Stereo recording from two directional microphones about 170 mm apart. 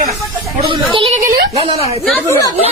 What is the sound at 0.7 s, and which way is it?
Speech, 30° right (ahead or behind).